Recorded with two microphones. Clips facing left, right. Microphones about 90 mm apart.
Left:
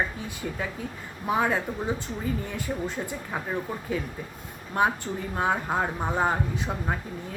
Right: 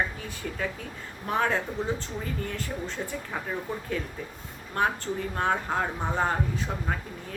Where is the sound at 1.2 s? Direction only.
10° left (ahead or behind).